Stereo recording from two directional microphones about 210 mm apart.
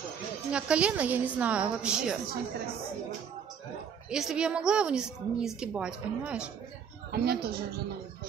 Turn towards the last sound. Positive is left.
turn(degrees=-50)  # may be behind; listen again after turning